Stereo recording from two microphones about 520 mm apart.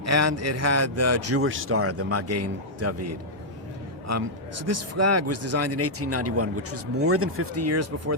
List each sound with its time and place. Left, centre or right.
0.0 s a man's voice: right